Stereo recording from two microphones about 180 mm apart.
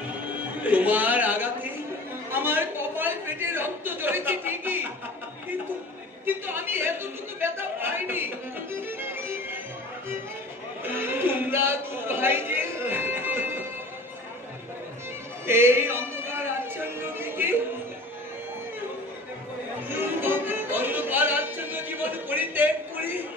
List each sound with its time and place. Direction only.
0.6 s speech: 10° right (ahead or behind)
2.3 s a sound: 10° right (ahead or behind)
6.2 s a man's voice: 10° right (ahead or behind)
8.7 s music: 10° right (ahead or behind)
10.9 s a sound: 10° right (ahead or behind)
15.4 s music: 15° right (ahead or behind)
20.0 s music: 10° right (ahead or behind)